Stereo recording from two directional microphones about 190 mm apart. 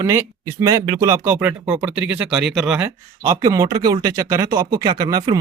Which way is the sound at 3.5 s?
15° right (ahead or behind).